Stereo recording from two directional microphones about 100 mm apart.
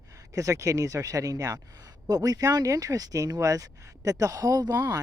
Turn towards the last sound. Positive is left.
turn(degrees=-40)  # may be behind; listen again after turning